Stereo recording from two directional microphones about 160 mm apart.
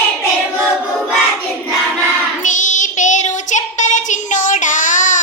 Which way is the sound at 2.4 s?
50° left (ahead or behind).